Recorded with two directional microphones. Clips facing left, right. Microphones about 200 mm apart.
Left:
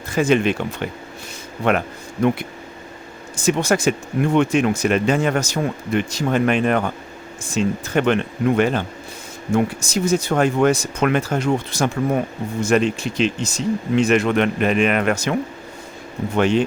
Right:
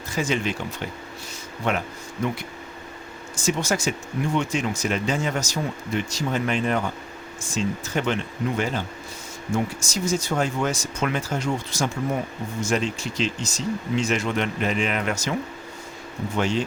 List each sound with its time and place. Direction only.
0.1 s speech: 55° left (ahead or behind)